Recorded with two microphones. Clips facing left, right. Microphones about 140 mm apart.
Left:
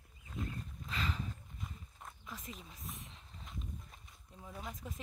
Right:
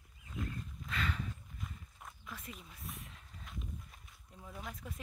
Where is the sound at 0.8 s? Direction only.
30° left (ahead or behind).